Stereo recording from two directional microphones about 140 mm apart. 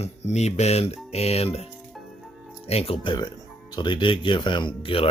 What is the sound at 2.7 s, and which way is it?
Speech, 45° left (ahead or behind).